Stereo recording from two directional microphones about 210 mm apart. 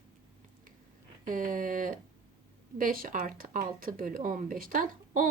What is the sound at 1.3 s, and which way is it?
A woman's voice, 40° right (ahead or behind).